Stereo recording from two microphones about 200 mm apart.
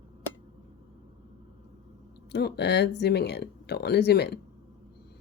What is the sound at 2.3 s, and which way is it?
Speech, 55° left (ahead or behind).